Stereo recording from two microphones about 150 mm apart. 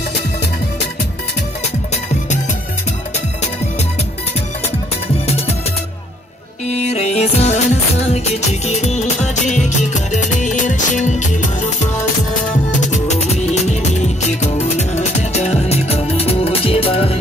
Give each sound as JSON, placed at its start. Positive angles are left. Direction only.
{"t": 6.7, "sound": "music", "side_deg": 45}
{"t": 12.8, "sound": "music", "side_deg": 50}